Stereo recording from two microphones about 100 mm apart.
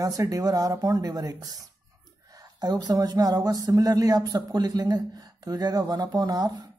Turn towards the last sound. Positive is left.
turn(degrees=-40)  # may be behind; listen again after turning